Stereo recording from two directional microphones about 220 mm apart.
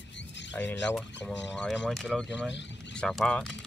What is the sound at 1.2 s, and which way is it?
Speech, 5° left (ahead or behind).